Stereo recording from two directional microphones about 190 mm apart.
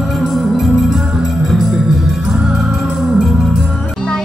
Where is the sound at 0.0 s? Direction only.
Centre (ahead or behind).